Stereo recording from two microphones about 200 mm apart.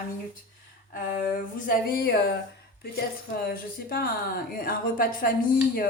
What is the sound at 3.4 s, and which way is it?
Speech, 50° left (ahead or behind).